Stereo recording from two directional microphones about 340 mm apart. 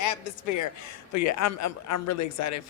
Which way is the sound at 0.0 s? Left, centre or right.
Left.